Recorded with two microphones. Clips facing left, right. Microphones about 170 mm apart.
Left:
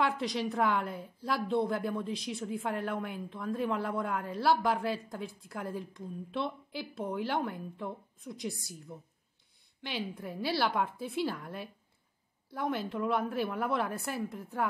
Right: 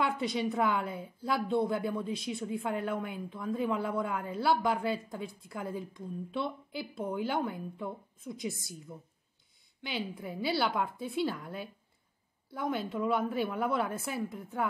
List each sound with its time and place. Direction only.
0.0 s a woman's voice: centre (ahead or behind)